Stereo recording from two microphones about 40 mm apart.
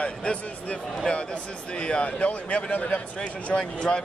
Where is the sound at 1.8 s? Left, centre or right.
Left.